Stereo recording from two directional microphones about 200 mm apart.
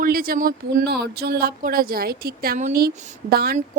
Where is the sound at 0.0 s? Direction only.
45° right (ahead or behind).